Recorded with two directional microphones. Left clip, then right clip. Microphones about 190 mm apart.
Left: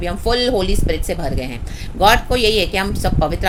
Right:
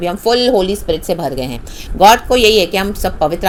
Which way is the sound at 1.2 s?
25° right (ahead or behind).